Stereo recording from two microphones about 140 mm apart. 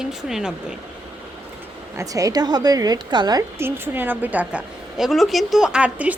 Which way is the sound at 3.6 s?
15° right (ahead or behind).